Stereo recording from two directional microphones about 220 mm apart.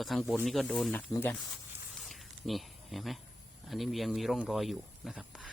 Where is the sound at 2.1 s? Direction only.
Centre (ahead or behind).